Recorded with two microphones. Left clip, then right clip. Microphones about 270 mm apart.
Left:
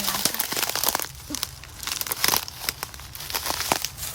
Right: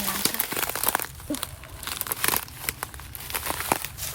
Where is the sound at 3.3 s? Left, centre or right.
Centre.